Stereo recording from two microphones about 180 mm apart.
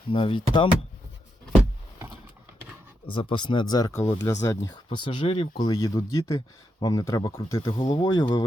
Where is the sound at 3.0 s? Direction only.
30° left (ahead or behind).